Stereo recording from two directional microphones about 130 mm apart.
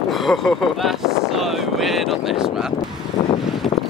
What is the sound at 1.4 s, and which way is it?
Speech, centre (ahead or behind).